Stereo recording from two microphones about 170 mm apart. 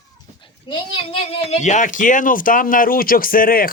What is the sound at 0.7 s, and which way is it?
Speech, 35° left (ahead or behind).